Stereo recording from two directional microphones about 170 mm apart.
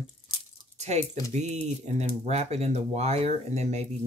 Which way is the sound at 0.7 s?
40° right (ahead or behind).